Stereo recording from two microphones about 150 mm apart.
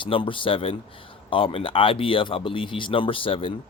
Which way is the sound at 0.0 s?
35° left (ahead or behind).